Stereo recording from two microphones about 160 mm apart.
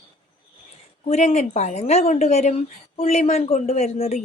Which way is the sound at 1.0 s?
40° left (ahead or behind).